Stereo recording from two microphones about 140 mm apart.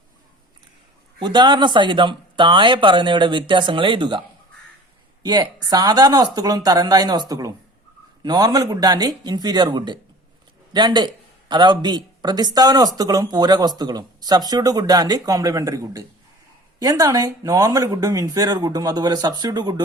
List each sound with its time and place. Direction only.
1.2 s speech: 30° right (ahead or behind)
5.2 s a man's voice: 30° right (ahead or behind)